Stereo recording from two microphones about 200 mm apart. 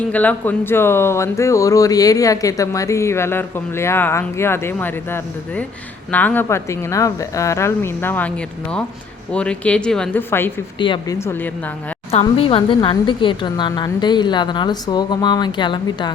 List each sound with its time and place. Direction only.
0.1 s speech: 10° left (ahead or behind)
10.8 s speech: 25° left (ahead or behind)
12.2 s a woman's voice: 25° left (ahead or behind)